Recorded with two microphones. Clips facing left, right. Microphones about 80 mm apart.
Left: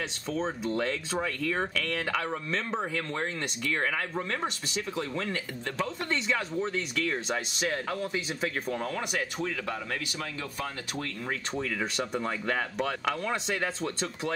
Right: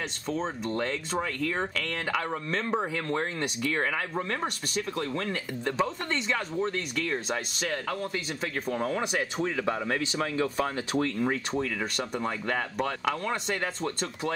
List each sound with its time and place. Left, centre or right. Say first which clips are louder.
0.4 s speech: left 2 dB; centre
8.9 s speech: right 3 dB; centre
11.5 s speech: right 1 dB; centre